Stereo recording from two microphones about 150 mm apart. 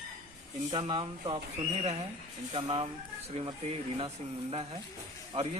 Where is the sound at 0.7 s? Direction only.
35° right (ahead or behind).